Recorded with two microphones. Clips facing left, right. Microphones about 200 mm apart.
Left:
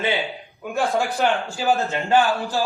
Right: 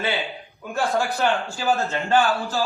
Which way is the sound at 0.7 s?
15° left (ahead or behind).